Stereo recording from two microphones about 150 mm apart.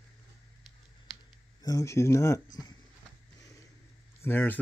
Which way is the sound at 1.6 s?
25° left (ahead or behind).